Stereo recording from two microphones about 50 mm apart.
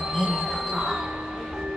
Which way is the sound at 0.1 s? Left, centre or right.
Centre.